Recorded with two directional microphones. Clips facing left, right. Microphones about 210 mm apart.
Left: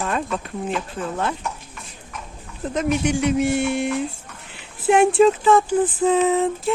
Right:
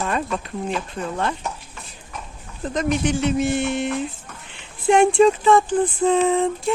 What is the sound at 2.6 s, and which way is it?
Speech, 10° left (ahead or behind).